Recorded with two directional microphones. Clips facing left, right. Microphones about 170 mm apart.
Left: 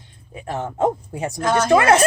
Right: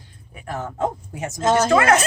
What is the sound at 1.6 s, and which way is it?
Speech, 25° left (ahead or behind).